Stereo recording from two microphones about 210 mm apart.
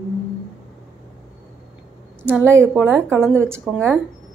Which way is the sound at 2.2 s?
10° right (ahead or behind).